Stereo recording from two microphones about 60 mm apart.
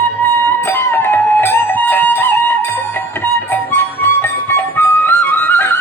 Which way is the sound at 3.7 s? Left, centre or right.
Left.